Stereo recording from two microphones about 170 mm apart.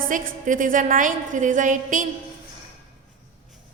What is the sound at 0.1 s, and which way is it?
A woman's voice, 50° right (ahead or behind).